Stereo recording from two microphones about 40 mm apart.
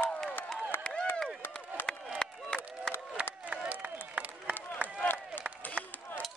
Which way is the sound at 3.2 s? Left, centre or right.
Right.